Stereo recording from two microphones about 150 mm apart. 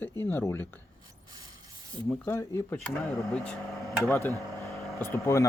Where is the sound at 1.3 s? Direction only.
25° right (ahead or behind).